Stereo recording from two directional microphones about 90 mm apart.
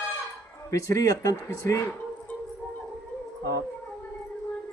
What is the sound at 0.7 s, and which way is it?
A man's voice, 40° left (ahead or behind).